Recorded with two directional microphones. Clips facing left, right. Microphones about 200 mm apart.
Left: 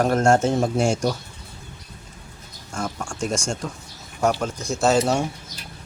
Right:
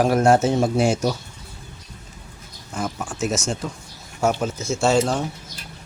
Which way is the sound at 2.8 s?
5° right (ahead or behind).